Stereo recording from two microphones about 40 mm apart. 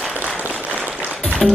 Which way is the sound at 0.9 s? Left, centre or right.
Right.